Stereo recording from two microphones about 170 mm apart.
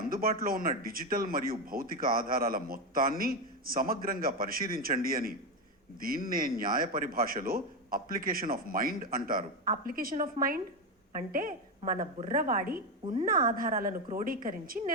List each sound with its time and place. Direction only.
0.0 s speech: 60° right (ahead or behind)